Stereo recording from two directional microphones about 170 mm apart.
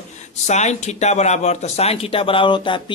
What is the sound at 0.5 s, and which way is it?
Speech, 40° left (ahead or behind).